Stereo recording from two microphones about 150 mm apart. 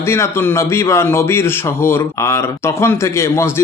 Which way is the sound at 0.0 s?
15° left (ahead or behind).